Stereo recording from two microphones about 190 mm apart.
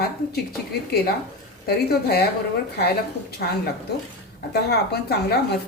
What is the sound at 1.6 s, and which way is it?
Speech, 55° left (ahead or behind).